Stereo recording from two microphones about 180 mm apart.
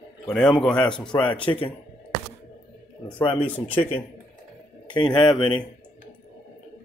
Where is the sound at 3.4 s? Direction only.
10° left (ahead or behind).